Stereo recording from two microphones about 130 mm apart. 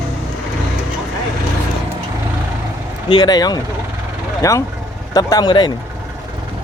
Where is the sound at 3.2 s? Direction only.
30° left (ahead or behind).